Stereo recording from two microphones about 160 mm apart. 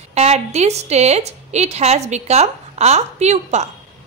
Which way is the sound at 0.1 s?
40° right (ahead or behind).